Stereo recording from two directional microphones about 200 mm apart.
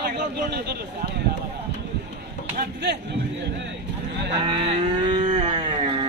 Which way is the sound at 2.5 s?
55° right (ahead or behind).